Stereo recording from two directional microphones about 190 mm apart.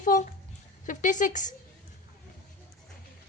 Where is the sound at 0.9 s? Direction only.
40° left (ahead or behind).